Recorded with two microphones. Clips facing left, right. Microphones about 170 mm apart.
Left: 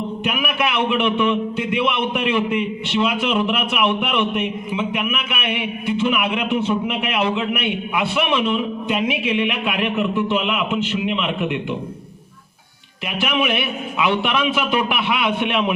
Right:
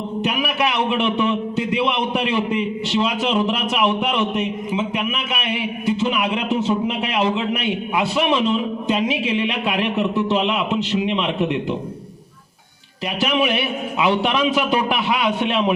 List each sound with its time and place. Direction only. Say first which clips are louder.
0.3 s a man's voice: right 1 dB; 35° right (ahead or behind)
5.3 s a man's voice: even; 35° right (ahead or behind)
13.1 s a man's voice: right 1 dB; 35° right (ahead or behind)